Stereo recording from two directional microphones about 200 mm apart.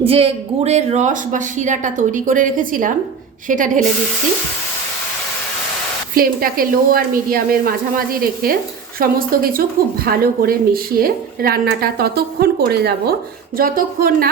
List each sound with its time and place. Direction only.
0.0 s speech: 30° right (ahead or behind)
6.1 s a woman's voice: 45° right (ahead or behind)